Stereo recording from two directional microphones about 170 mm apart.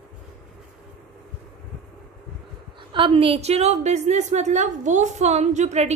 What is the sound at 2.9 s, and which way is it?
A woman's voice, 30° right (ahead or behind).